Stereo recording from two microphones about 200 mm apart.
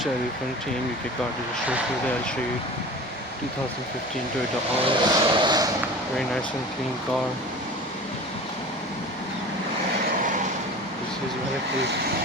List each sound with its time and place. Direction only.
4.8 s speech: 25° right (ahead or behind)